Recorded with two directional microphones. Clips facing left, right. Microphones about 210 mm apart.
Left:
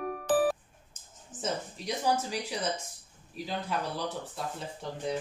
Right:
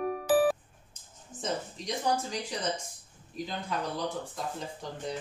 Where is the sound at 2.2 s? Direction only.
10° left (ahead or behind).